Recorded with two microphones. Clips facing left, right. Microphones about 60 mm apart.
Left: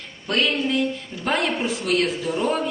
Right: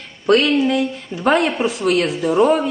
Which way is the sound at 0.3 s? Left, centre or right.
Right.